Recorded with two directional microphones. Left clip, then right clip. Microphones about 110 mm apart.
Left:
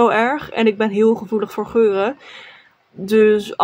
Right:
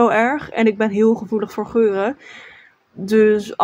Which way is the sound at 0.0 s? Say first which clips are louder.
Even; 10° left (ahead or behind).